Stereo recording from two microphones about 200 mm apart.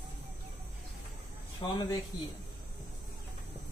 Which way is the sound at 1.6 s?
20° left (ahead or behind).